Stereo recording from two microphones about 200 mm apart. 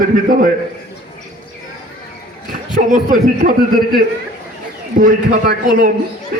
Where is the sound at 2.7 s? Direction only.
40° right (ahead or behind).